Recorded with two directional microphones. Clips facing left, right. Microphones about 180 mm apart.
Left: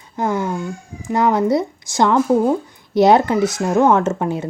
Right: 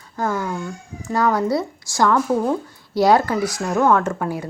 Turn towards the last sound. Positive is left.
turn(degrees=25)  # may be behind; listen again after turning